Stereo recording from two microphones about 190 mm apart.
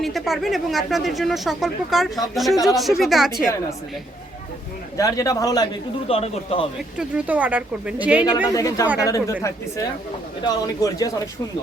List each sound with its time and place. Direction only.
0.0 s speech: centre (ahead or behind)
4.9 s a man's voice: 15° left (ahead or behind)
6.1 s speech: 30° left (ahead or behind)
7.0 s speech: 5° right (ahead or behind)
8.4 s a man's voice: 20° left (ahead or behind)
10.4 s a man's voice: 20° left (ahead or behind)